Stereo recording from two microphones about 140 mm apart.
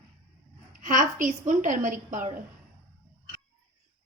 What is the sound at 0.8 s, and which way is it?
A woman's voice, 70° right (ahead or behind).